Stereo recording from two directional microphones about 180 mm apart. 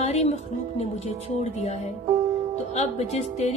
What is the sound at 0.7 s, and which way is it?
A woman's voice, 35° left (ahead or behind).